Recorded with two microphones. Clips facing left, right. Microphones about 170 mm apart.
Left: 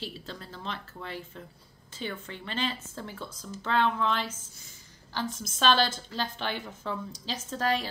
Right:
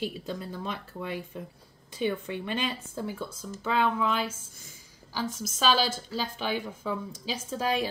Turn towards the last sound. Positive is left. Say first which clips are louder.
# right 1 dB
turn(degrees=-10)  # may be behind; listen again after turning